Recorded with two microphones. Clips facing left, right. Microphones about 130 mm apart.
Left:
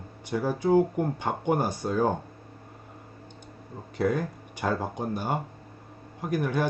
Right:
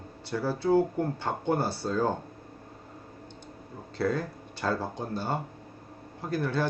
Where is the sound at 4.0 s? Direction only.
15° left (ahead or behind).